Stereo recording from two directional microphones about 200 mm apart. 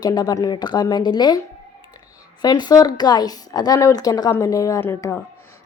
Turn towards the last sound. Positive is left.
turn(degrees=10)  # may be behind; listen again after turning